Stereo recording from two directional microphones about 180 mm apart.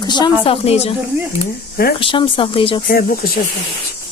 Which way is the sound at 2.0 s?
30° left (ahead or behind).